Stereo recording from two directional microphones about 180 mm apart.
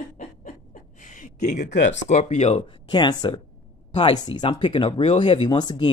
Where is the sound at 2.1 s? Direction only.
35° left (ahead or behind).